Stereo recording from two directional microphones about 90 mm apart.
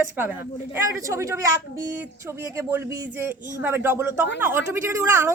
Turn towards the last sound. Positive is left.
turn(degrees=-30)  # may be behind; listen again after turning